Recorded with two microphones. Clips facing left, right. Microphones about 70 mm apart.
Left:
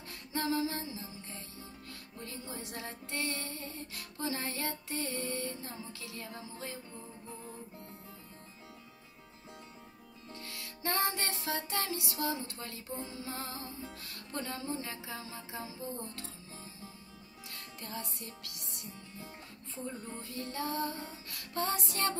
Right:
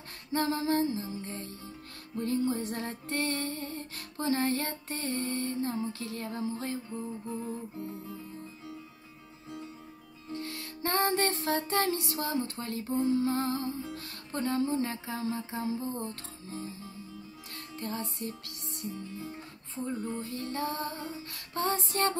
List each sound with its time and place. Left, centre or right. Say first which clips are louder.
0.3 s music: right 5 dB; right
10.3 s music: right 9 dB; right
13.1 s music: right 13 dB; right
17.7 s music: right 7 dB; right